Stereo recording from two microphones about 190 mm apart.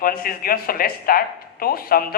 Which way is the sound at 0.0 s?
50° left (ahead or behind).